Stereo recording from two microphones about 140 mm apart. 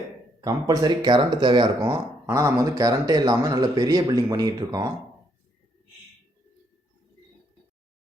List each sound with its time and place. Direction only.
0.4 s speech: 25° right (ahead or behind)